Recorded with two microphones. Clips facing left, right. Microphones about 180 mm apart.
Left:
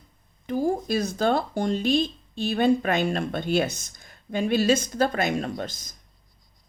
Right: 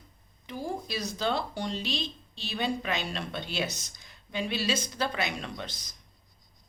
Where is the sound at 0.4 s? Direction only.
45° left (ahead or behind).